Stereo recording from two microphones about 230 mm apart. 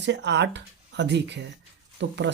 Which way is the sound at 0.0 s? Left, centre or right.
Right.